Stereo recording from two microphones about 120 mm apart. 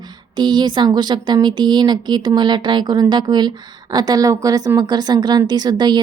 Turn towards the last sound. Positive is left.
turn(degrees=-35)  # may be behind; listen again after turning